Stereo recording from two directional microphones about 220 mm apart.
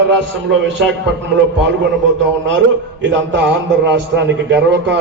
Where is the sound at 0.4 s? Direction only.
55° right (ahead or behind).